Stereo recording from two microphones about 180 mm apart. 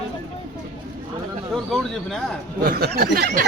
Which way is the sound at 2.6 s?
60° right (ahead or behind).